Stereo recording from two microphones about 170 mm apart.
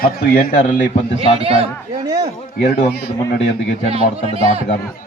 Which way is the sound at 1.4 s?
35° right (ahead or behind).